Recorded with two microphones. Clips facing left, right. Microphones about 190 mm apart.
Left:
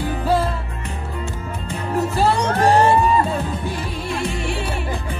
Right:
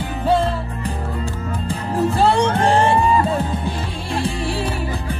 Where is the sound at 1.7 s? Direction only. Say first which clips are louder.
Right 2 dB; 30° right (ahead or behind).